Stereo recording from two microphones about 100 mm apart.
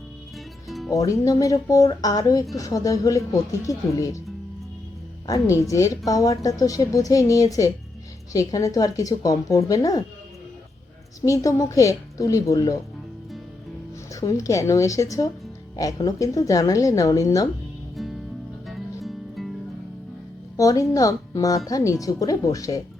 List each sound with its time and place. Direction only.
0.9 s speech: 35° left (ahead or behind)
5.2 s speech: 35° left (ahead or behind)
11.3 s speech: 35° left (ahead or behind)
14.1 s speech: 35° left (ahead or behind)
17.9 s music: centre (ahead or behind)
20.6 s speech: 35° left (ahead or behind)